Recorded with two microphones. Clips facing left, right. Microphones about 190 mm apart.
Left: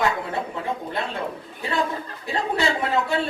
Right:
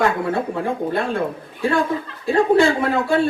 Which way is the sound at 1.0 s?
50° right (ahead or behind).